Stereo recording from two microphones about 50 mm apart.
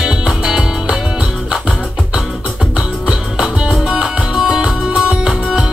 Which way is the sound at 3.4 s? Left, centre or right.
Centre.